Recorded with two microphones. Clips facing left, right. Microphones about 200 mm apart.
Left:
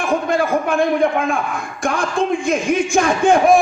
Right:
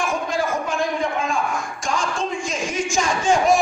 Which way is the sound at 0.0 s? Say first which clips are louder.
Left 5 dB; 60° left (ahead or behind).